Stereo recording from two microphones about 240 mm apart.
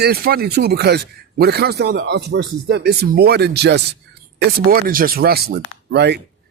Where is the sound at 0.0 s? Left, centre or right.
Right.